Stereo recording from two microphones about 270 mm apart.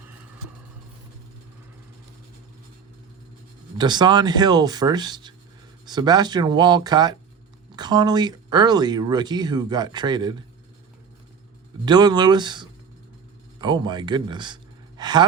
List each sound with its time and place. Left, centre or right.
3.8 s speech: centre
11.9 s a man's voice: centre